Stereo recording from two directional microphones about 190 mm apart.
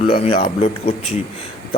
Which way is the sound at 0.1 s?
30° left (ahead or behind).